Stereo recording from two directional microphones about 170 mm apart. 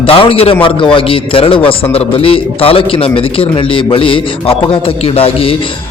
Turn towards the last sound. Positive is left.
turn(degrees=35)  # may be behind; listen again after turning